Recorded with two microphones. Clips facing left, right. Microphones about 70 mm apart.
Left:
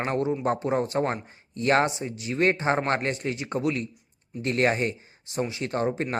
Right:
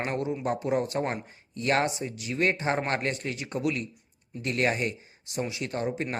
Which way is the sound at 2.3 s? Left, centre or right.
Left.